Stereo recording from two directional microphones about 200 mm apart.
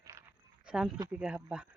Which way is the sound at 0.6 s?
5° right (ahead or behind).